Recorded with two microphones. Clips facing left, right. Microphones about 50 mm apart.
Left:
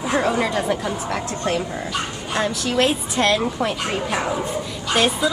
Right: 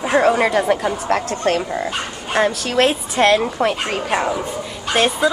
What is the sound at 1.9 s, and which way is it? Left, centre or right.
A woman's voice, right.